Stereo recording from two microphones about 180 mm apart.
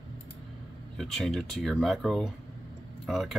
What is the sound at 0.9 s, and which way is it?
Speech, centre (ahead or behind).